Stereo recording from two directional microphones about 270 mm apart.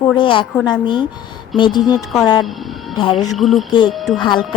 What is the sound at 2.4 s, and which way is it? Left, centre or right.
Speech, centre.